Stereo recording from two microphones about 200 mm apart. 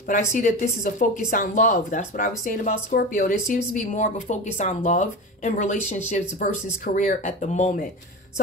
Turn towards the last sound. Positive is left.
turn(degrees=40)  # may be behind; listen again after turning